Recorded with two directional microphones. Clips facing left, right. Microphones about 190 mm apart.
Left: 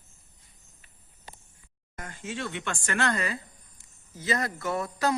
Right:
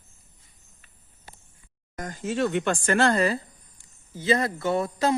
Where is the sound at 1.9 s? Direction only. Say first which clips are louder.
Right 8 dB; 40° right (ahead or behind).